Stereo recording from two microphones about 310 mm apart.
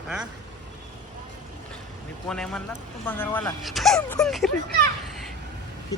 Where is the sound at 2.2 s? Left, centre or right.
Centre.